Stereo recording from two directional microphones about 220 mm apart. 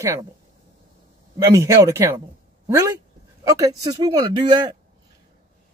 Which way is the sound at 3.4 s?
15° right (ahead or behind).